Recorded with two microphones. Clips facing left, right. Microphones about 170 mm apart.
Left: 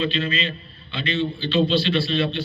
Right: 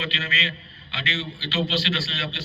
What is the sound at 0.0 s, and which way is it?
A man's voice, 90° right.